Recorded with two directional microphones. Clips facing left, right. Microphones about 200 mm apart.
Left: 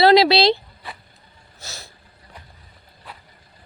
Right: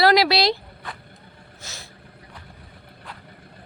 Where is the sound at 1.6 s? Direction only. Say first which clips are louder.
Left 2 dB; 40° left (ahead or behind).